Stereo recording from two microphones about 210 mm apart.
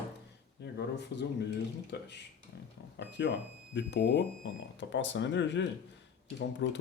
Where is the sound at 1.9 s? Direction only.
55° left (ahead or behind).